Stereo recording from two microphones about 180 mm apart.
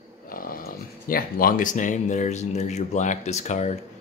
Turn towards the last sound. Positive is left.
turn(degrees=40)  # may be behind; listen again after turning